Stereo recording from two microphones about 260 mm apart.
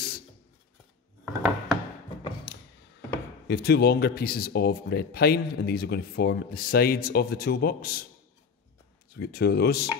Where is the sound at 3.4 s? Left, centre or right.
Left.